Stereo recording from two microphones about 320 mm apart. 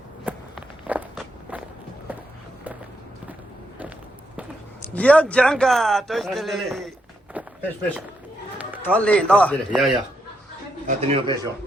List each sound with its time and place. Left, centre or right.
0.3 s walk: centre
4.8 s a man's voice: centre
10.8 s speech: centre